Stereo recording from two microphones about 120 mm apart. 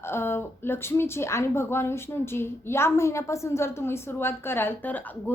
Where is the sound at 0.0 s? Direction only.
20° left (ahead or behind).